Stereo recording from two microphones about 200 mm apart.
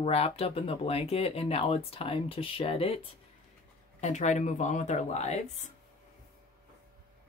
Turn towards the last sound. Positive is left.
turn(degrees=35)  # may be behind; listen again after turning